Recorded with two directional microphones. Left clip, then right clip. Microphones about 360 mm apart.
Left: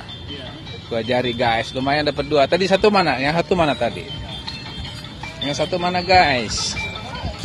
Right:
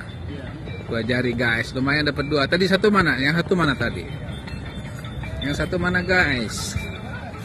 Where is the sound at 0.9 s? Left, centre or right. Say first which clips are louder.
Left 3 dB; left.